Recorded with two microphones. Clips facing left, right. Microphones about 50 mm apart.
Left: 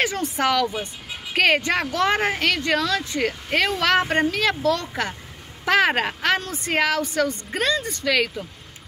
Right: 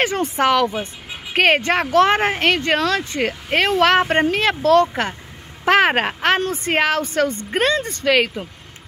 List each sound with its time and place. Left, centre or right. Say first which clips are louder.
0.0 s a child's voice: right 4 dB; right
2.0 s a child's voice: right 8 dB; right
3.2 s a child's voice: right 1 dB; right
6.3 s a woman's voice: right 4 dB; right